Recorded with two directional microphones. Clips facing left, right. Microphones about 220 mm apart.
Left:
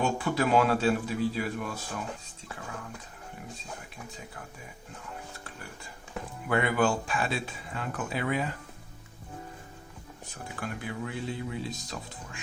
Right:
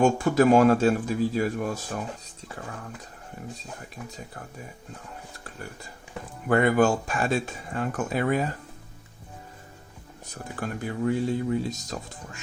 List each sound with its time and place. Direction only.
0.0 s speech: 45° right (ahead or behind)
6.5 s speech: 45° right (ahead or behind)
10.2 s speech: 40° right (ahead or behind)